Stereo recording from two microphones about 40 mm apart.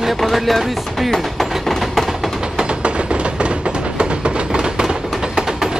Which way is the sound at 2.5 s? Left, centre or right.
Right.